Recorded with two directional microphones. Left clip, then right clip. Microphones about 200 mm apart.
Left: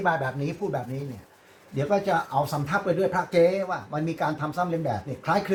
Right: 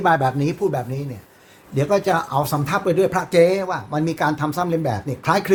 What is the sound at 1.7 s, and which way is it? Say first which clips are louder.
Speech: right 5 dB; 60° right (ahead or behind).